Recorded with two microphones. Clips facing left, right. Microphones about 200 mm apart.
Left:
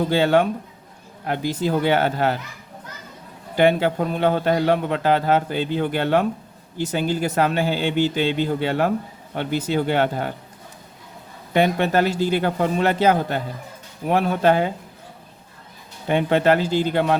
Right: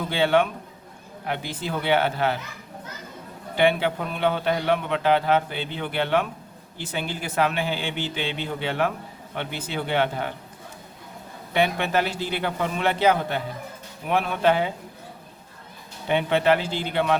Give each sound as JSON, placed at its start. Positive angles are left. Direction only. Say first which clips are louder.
{"t": 0.1, "sound": "a man's voice", "louder": "even", "side_deg": 40}
{"t": 3.5, "sound": "a man's voice", "louder": "left 4 dB", "side_deg": 45}
{"t": 11.5, "sound": "a man's voice", "louder": "left 4 dB", "side_deg": 45}
{"t": 16.0, "sound": "a man's voice", "louder": "left 3 dB", "side_deg": 45}